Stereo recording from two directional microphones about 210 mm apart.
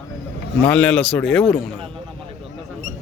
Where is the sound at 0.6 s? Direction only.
5° left (ahead or behind).